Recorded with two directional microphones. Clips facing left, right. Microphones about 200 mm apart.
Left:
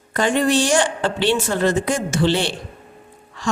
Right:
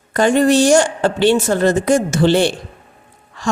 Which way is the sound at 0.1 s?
45° right (ahead or behind).